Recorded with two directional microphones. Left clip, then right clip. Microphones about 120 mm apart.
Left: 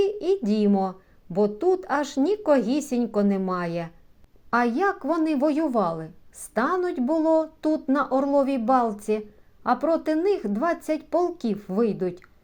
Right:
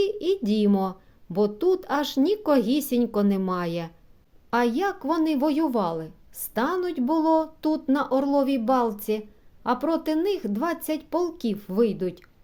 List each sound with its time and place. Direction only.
0.7 s speech: 25° right (ahead or behind)